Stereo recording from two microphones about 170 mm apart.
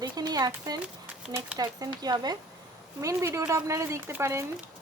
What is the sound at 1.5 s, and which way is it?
Speech, 25° right (ahead or behind).